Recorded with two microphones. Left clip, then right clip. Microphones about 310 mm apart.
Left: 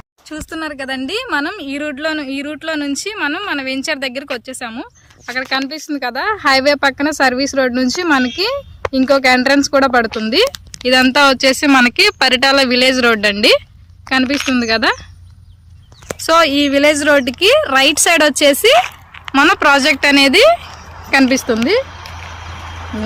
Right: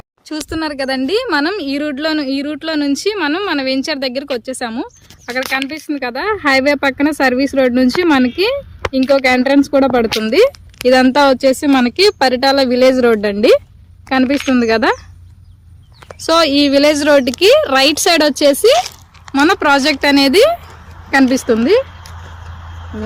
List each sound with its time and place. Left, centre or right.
0.3 s speech: centre
14.5 s speech: centre
16.2 s speech: centre
21.8 s a sound: left